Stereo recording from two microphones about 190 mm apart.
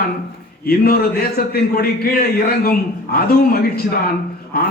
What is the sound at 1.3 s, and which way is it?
A man's voice, 55° left (ahead or behind).